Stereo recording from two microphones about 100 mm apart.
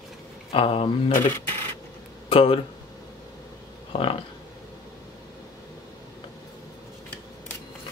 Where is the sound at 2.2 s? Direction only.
65° left (ahead or behind).